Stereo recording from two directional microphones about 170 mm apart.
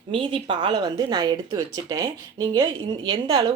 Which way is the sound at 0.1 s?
30° right (ahead or behind).